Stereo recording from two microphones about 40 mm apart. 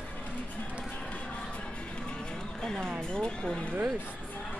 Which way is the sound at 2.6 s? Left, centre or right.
Centre.